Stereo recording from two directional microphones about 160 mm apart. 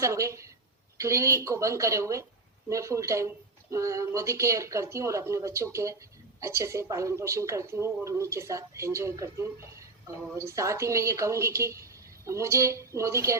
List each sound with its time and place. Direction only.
0.0 s speech: 20° right (ahead or behind)